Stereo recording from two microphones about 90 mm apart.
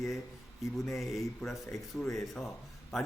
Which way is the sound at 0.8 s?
Centre (ahead or behind).